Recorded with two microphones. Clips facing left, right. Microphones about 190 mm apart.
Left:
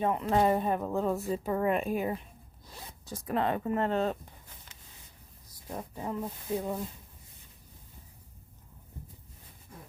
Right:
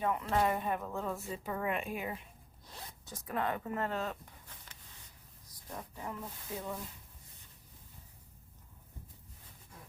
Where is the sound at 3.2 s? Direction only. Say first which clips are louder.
Left 6 dB; 25° left (ahead or behind).